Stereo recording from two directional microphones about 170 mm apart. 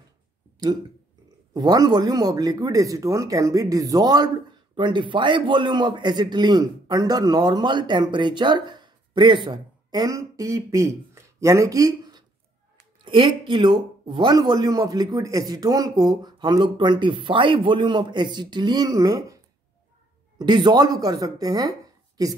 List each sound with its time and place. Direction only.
1.5 s a man's voice: 25° right (ahead or behind)